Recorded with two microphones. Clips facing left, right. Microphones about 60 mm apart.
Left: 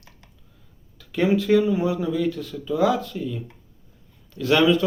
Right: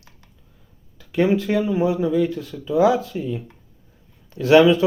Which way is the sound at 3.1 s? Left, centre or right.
Centre.